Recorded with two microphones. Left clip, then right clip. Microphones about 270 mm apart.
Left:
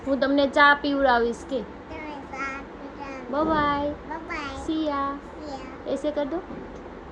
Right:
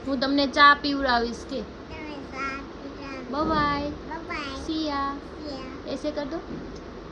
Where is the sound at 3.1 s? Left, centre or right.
Centre.